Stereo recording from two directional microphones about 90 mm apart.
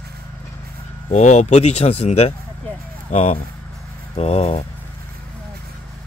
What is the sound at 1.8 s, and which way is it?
Speech, 90° left.